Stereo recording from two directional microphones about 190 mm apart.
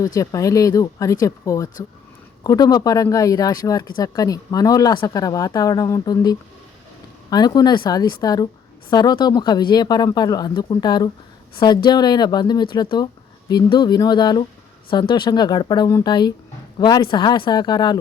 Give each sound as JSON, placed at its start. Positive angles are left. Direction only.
{"t": 0.0, "sound": "speech", "side_deg": 20}